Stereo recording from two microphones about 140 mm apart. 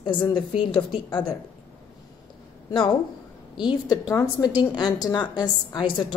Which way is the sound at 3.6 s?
35° left (ahead or behind).